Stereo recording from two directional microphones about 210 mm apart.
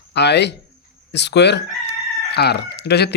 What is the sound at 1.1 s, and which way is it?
Speech, 55° left (ahead or behind).